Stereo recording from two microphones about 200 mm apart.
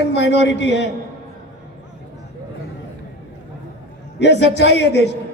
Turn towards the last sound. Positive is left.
turn(degrees=60)  # may be behind; listen again after turning